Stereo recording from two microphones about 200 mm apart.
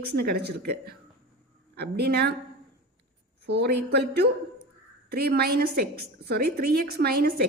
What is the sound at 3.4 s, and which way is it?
A woman's voice, 55° right (ahead or behind).